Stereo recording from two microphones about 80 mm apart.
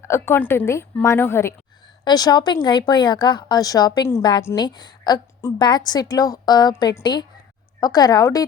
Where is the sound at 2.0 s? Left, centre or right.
Left.